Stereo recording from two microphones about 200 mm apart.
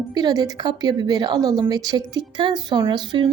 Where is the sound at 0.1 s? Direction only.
20° right (ahead or behind).